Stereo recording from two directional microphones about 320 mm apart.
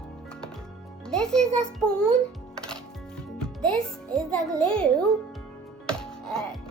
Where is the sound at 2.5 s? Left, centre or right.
Centre.